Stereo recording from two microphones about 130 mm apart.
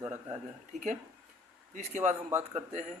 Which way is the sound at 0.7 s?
75° right (ahead or behind).